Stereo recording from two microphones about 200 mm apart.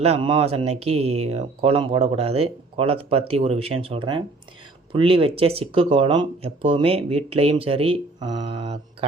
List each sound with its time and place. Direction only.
0.0 s speech: 30° right (ahead or behind)